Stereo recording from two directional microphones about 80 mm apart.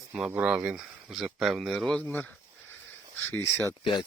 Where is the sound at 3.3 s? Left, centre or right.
Left.